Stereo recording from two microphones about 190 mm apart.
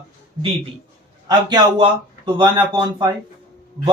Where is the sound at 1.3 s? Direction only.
25° right (ahead or behind).